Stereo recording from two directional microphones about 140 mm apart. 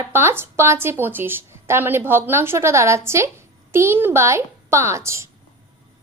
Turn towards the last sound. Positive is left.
turn(degrees=-20)  # may be behind; listen again after turning